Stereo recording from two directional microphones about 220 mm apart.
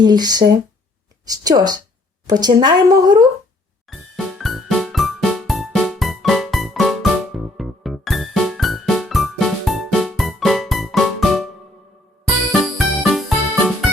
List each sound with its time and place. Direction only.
0.0 s a woman's voice: 20° right (ahead or behind)
3.8 s music: centre (ahead or behind)
12.5 s music: centre (ahead or behind)